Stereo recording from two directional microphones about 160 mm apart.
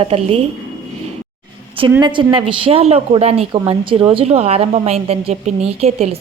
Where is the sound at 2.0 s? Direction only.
30° right (ahead or behind).